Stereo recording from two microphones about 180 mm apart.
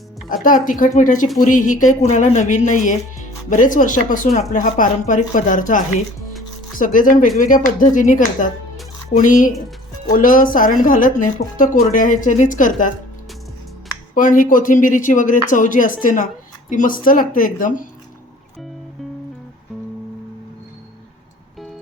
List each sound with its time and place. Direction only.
0.4 s speech: 50° left (ahead or behind)
14.2 s speech: 45° left (ahead or behind)